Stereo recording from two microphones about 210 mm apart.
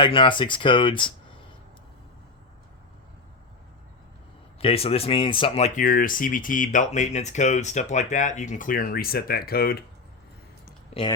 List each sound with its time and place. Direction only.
0.0 s speech: 25° left (ahead or behind)
4.5 s speech: 25° left (ahead or behind); by 9.8 s 45° left (ahead or behind)